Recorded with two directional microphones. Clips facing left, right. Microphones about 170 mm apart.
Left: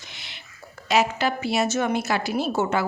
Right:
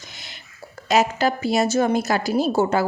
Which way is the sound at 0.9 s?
40° right (ahead or behind).